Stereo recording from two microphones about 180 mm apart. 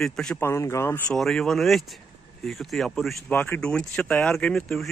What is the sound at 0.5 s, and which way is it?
Speech, 15° left (ahead or behind).